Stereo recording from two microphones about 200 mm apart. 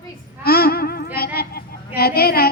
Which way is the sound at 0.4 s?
50° left (ahead or behind).